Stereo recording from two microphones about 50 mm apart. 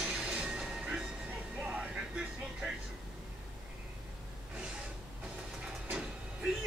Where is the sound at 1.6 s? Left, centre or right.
Centre.